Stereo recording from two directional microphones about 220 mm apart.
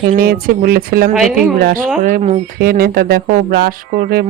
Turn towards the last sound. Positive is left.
turn(degrees=-40)  # may be behind; listen again after turning